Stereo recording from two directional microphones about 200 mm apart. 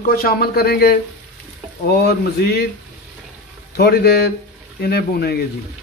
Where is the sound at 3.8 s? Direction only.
50° left (ahead or behind).